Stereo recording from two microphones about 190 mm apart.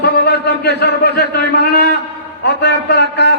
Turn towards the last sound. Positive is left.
turn(degrees=60)  # may be behind; listen again after turning